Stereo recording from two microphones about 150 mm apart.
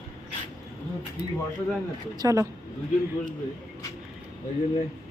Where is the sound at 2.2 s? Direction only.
20° right (ahead or behind).